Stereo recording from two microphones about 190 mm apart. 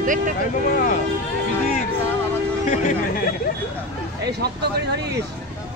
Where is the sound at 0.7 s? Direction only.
45° left (ahead or behind).